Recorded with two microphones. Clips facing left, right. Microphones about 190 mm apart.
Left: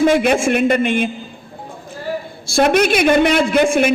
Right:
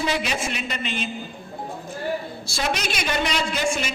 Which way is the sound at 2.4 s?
50° left (ahead or behind).